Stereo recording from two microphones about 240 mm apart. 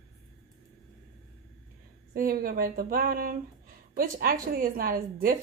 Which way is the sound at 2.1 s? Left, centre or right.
Right.